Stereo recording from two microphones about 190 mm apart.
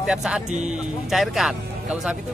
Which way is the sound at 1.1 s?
Centre (ahead or behind).